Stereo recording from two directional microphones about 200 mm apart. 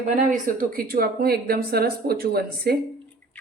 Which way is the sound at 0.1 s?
40° right (ahead or behind).